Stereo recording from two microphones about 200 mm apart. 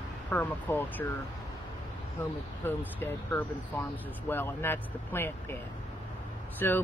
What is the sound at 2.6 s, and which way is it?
Speech, 10° left (ahead or behind).